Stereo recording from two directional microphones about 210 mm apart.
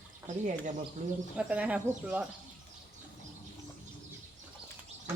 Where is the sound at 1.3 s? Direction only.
5° right (ahead or behind).